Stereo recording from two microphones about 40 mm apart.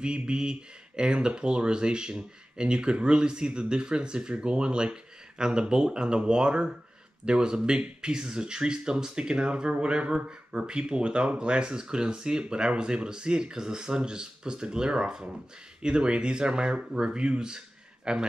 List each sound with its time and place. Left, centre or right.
0.3 s speech: right